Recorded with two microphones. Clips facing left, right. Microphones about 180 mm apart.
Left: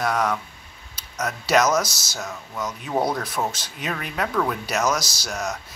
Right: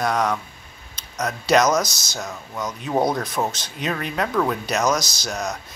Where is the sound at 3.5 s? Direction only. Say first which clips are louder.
Right 4 dB; 5° left (ahead or behind).